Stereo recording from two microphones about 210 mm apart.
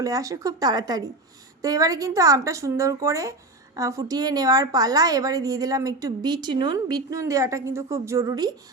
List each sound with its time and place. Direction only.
0.0 s a woman's voice: 15° right (ahead or behind)